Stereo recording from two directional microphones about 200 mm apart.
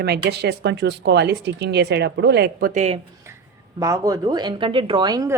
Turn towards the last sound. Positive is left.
turn(degrees=-20)  # may be behind; listen again after turning